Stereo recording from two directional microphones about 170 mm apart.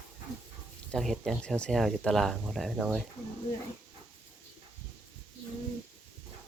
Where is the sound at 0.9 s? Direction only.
Centre (ahead or behind).